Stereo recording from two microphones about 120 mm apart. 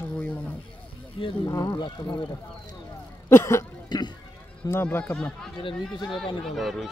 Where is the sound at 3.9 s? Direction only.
35° left (ahead or behind).